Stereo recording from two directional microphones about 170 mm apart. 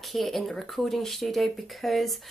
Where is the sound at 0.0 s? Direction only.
Centre (ahead or behind).